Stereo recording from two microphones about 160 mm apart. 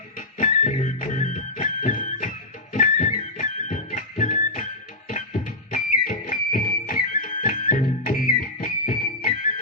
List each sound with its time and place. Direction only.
0.2 s music: 50° left (ahead or behind)